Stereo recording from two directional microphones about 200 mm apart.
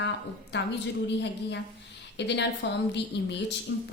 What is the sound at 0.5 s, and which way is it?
Speech, 60° left (ahead or behind).